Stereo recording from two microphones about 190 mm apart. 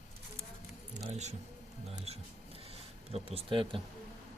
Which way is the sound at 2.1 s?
35° right (ahead or behind).